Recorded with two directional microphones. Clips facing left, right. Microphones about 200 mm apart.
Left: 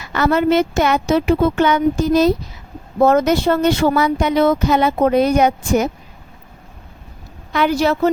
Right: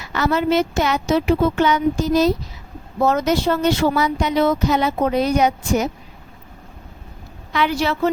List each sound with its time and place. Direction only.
0.1 s speech: 55° left (ahead or behind)
7.5 s speech: 45° left (ahead or behind)